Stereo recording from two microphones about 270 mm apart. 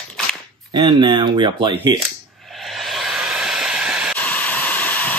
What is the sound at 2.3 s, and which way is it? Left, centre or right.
Vehicle, centre.